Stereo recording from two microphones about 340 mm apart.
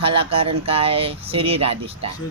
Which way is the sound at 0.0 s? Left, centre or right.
Centre.